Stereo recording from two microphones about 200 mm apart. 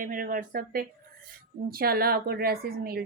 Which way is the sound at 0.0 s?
45° right (ahead or behind).